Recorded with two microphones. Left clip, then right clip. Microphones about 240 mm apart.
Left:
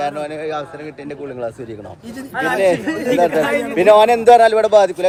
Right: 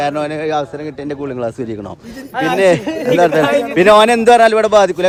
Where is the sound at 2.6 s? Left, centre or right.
Right.